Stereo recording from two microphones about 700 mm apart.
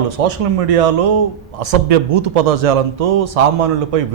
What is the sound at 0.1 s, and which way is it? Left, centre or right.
A man's voice, right.